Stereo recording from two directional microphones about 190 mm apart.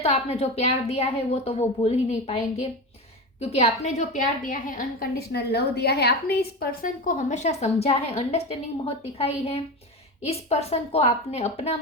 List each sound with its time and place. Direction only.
0.0 s a woman's voice: 30° left (ahead or behind)